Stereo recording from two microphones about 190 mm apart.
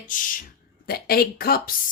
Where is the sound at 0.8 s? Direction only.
55° left (ahead or behind).